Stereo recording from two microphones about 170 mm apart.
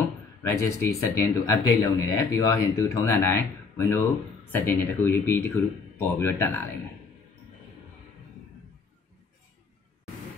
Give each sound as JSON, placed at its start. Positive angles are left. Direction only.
{"t": 0.4, "sound": "speech", "side_deg": 15}